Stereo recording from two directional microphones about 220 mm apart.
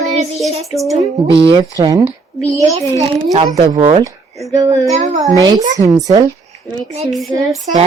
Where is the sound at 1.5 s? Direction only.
20° right (ahead or behind).